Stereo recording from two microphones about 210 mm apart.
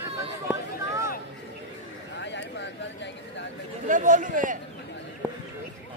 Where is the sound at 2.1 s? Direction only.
55° left (ahead or behind).